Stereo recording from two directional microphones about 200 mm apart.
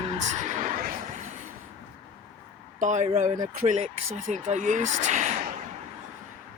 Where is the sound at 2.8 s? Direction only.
35° right (ahead or behind).